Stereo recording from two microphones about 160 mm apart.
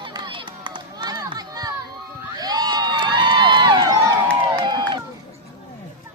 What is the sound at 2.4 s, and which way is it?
Crowd, 25° right (ahead or behind).